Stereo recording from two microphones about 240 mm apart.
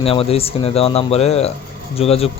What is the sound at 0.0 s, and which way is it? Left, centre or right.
A man's voice, left.